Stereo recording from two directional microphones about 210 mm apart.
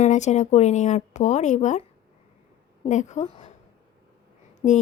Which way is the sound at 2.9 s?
35° left (ahead or behind).